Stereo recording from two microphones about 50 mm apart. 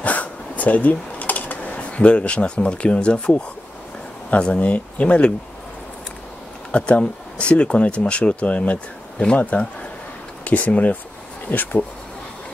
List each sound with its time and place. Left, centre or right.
0.0 s a sound: left
4.3 s speech: left
6.7 s speech: left